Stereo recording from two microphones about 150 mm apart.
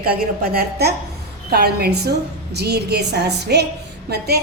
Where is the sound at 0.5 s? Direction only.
90° right.